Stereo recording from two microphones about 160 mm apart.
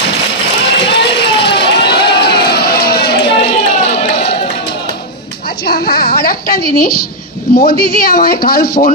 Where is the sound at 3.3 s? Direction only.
40° left (ahead or behind).